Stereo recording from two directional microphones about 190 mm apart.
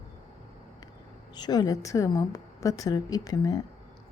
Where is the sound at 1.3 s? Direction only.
20° left (ahead or behind).